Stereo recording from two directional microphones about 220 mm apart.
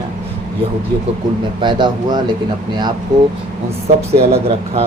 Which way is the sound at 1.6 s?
20° right (ahead or behind).